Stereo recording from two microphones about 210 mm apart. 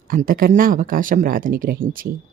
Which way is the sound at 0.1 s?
45° right (ahead or behind).